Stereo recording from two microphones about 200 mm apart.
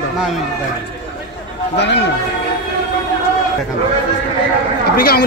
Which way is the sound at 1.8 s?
60° left (ahead or behind).